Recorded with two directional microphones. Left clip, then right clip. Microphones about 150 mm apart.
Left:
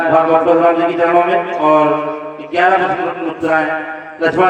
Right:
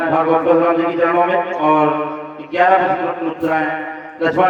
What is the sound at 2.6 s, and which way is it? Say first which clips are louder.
Speech: left 1 dB; 20° right (ahead or behind).